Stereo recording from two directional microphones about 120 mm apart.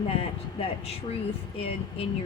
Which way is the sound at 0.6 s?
55° left (ahead or behind).